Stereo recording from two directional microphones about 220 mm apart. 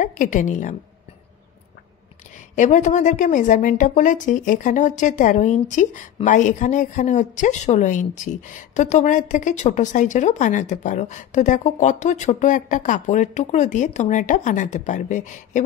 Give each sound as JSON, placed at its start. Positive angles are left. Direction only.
{"t": 0.0, "sound": "a woman's voice", "side_deg": 35}
{"t": 2.3, "sound": "a woman's voice", "side_deg": 35}